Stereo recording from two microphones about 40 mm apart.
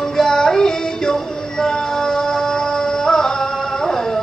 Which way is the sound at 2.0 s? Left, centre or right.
Centre.